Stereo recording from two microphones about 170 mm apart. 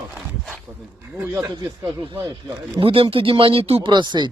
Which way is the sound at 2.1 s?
25° right (ahead or behind).